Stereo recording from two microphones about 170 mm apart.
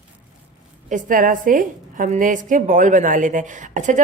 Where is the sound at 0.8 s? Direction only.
50° right (ahead or behind).